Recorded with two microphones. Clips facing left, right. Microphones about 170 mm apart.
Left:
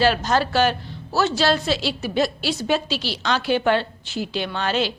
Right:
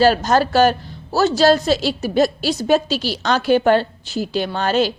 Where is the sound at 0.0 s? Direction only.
40° right (ahead or behind).